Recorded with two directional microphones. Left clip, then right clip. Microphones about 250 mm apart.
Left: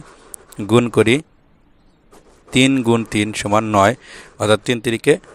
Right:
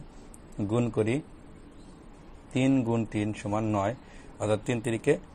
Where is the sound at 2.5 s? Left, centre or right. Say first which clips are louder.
Left 12 dB; left.